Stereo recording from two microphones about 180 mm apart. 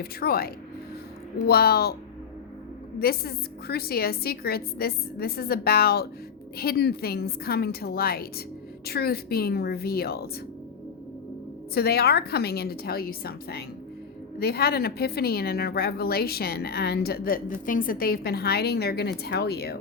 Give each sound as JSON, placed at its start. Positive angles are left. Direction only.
{"t": 0.0, "sound": "a woman's voice", "side_deg": 60}
{"t": 3.0, "sound": "a woman's voice", "side_deg": 60}
{"t": 11.7, "sound": "a woman's voice", "side_deg": 60}